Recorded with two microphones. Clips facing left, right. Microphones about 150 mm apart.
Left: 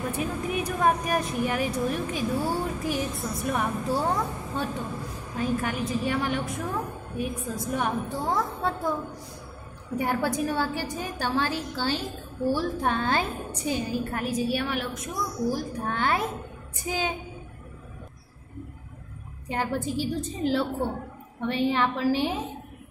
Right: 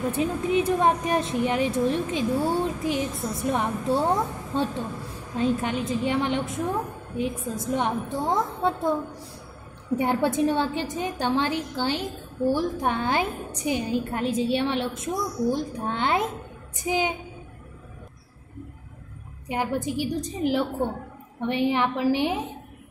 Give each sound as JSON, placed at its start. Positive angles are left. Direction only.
{"t": 0.1, "sound": "a woman's voice", "side_deg": -25}
{"t": 9.9, "sound": "a woman's voice", "side_deg": -25}
{"t": 19.4, "sound": "a woman's voice", "side_deg": -15}